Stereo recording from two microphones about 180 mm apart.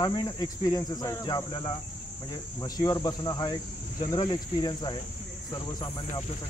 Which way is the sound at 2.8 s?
20° left (ahead or behind).